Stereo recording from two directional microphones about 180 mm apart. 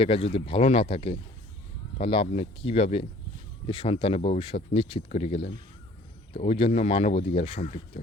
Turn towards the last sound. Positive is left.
turn(degrees=35)  # may be behind; listen again after turning